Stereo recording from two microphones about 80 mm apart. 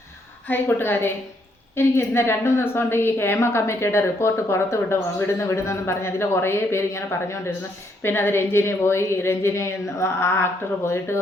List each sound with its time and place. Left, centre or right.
0.4 s a woman's voice: left